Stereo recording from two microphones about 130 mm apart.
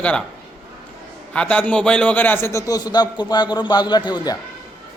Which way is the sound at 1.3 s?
10° left (ahead or behind).